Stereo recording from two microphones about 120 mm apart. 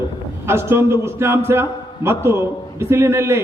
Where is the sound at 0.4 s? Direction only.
20° right (ahead or behind).